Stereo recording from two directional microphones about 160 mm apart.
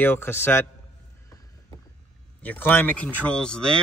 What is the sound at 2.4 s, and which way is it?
Speech, 10° left (ahead or behind).